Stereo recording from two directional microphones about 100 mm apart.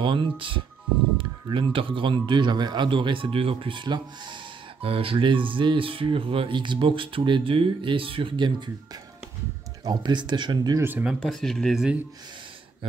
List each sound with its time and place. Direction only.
0.0 s speech: 55° right (ahead or behind)
4.8 s speech: 65° right (ahead or behind); by 8.6 s 50° right (ahead or behind)
9.8 s speech: 45° right (ahead or behind)
10.8 s speech: 20° right (ahead or behind)
11.1 s speech: 5° left (ahead or behind)